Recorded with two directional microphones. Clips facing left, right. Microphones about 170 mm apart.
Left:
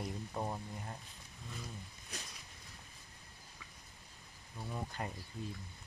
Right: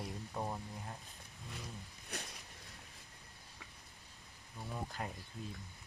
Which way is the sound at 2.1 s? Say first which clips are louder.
Right 4 dB; 65° right (ahead or behind).